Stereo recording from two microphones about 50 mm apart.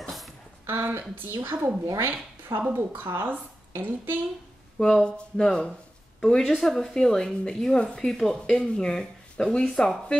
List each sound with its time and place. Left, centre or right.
0.8 s a woman's voice: right
4.7 s speech: centre